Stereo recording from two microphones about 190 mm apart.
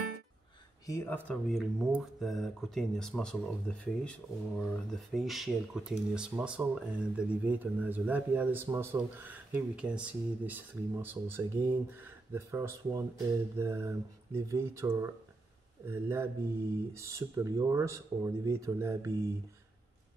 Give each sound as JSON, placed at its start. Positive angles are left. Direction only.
{"t": 0.8, "sound": "speech", "side_deg": 10}